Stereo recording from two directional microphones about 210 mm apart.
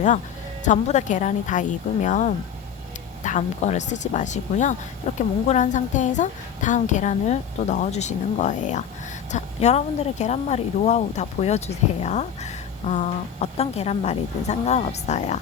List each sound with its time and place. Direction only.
0.6 s a woman's voice: 35° left (ahead or behind)